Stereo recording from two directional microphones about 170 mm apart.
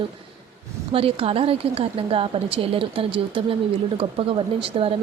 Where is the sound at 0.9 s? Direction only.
35° right (ahead or behind).